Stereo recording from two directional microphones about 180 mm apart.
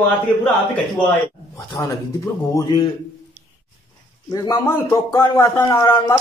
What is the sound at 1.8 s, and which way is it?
A man's voice, 20° left (ahead or behind).